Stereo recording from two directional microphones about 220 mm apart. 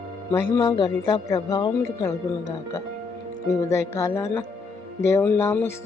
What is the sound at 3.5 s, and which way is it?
Speech, 10° left (ahead or behind).